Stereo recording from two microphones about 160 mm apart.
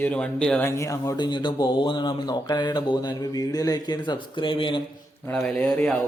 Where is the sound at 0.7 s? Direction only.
20° left (ahead or behind).